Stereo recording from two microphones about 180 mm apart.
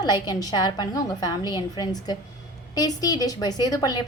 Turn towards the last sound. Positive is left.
turn(degrees=25)  # may be behind; listen again after turning